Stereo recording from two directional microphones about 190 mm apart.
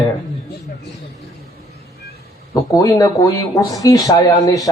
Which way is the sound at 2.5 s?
20° left (ahead or behind).